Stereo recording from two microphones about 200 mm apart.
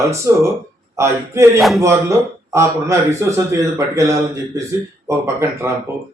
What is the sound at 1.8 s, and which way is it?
Speech, 15° right (ahead or behind).